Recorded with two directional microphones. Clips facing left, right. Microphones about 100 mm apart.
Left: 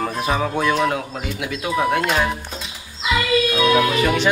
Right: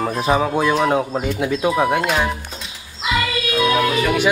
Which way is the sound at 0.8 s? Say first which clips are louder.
Right 5 dB; 30° right (ahead or behind).